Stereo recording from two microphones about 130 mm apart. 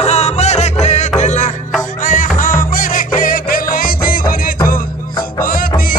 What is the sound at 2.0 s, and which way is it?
Music, 85° left.